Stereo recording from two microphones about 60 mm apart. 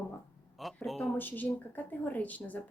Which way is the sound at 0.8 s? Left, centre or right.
Centre.